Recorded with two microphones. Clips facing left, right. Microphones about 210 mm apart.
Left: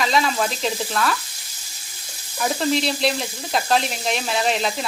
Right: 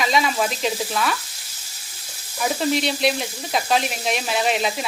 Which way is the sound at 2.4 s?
5° right (ahead or behind).